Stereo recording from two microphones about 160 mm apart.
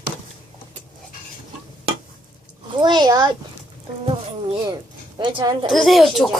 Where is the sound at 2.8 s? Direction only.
25° right (ahead or behind).